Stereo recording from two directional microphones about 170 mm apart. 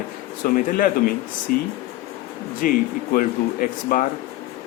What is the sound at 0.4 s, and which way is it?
Speech, 55° left (ahead or behind).